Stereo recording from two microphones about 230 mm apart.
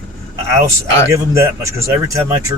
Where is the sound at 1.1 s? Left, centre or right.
Centre.